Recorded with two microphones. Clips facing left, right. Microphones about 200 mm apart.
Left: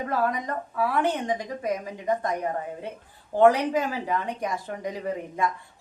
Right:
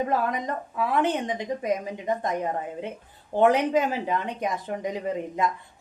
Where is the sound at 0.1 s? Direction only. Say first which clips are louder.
Even; 20° right (ahead or behind).